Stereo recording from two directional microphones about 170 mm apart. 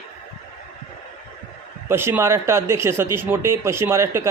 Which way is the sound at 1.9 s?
15° right (ahead or behind).